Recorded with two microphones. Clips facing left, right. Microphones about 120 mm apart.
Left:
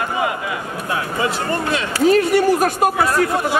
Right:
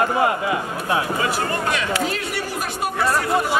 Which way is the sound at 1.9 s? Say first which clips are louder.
Left 11 dB; 45° left (ahead or behind).